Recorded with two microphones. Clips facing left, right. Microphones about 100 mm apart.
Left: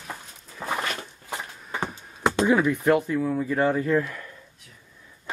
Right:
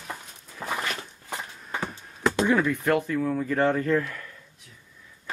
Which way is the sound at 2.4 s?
15° left (ahead or behind).